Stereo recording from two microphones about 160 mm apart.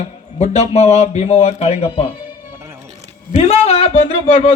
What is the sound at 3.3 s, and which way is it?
Speech, 40° left (ahead or behind).